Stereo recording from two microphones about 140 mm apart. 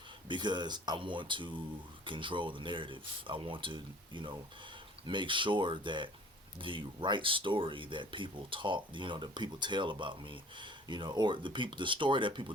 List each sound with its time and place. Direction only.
0.3 s speech: 35° right (ahead or behind)